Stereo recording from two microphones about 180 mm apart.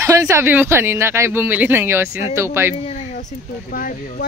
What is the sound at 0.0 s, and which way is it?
Speech, 15° right (ahead or behind).